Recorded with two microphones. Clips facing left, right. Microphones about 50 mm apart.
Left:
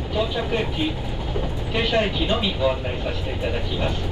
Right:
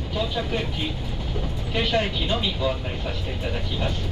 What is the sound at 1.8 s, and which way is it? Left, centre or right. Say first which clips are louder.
Speech: left 2 dB; centre.